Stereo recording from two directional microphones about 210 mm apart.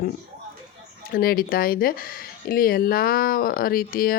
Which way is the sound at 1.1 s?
45° left (ahead or behind).